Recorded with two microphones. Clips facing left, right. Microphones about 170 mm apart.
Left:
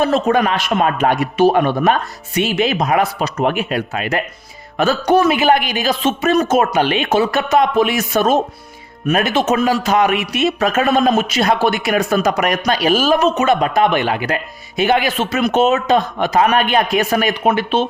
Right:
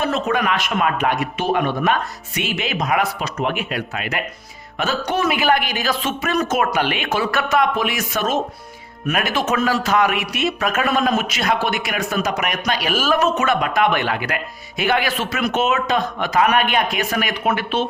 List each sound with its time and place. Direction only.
0.0 s a man's voice: 35° left (ahead or behind)
5.4 s speech: 20° left (ahead or behind)